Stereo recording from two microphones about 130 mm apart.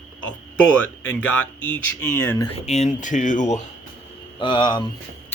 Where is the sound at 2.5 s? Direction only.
60° left (ahead or behind).